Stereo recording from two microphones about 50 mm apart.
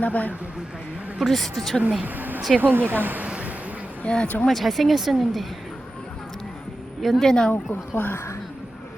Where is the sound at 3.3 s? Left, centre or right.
Right.